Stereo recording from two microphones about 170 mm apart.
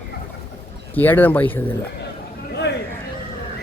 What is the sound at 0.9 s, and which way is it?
Speech, 10° left (ahead or behind).